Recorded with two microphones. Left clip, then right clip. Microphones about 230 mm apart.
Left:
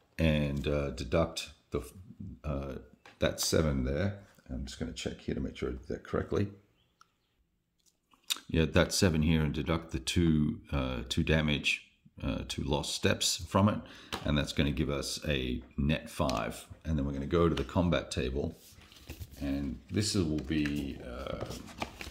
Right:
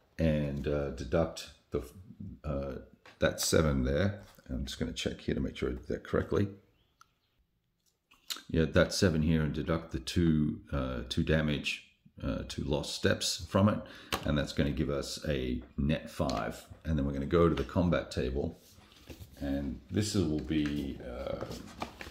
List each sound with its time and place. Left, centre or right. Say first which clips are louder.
0.1 s speech: left 1 dB; left; by 6.5 s centre
8.3 s speech: left 1 dB; centre
16.8 s speech: right 1 dB; centre
21.6 s speech: left 2 dB; left